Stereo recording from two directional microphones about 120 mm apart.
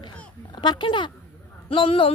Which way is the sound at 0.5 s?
40° left (ahead or behind).